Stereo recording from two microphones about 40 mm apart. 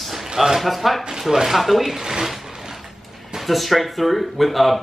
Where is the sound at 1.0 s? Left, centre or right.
Centre.